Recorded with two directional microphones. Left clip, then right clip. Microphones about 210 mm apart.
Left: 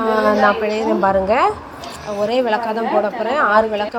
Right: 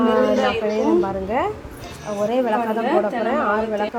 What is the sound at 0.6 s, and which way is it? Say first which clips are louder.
A woman's voice: left 3 dB; 25° left (ahead or behind).